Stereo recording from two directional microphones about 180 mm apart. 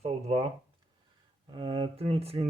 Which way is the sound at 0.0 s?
35° right (ahead or behind).